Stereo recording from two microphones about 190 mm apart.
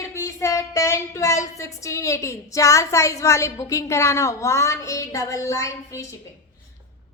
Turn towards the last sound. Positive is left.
turn(degrees=15)  # may be behind; listen again after turning